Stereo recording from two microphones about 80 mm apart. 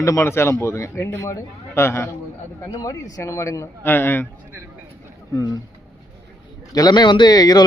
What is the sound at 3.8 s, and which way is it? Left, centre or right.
Speech, left.